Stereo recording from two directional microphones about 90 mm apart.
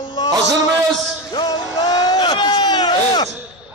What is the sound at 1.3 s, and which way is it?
Music, 50° left (ahead or behind).